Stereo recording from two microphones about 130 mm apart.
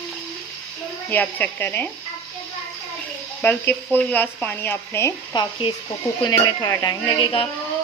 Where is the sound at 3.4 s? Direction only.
15° left (ahead or behind).